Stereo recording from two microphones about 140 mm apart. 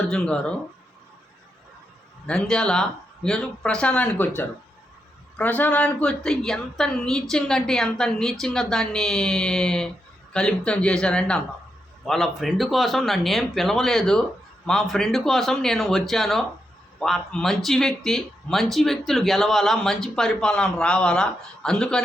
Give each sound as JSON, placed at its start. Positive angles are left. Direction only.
{"t": 0.1, "sound": "speech", "side_deg": 5}
{"t": 2.2, "sound": "speech", "side_deg": 5}